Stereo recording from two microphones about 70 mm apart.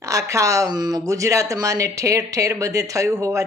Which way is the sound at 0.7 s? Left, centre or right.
Right.